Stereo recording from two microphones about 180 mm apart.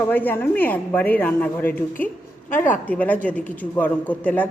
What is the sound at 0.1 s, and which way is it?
A woman's voice, 10° left (ahead or behind).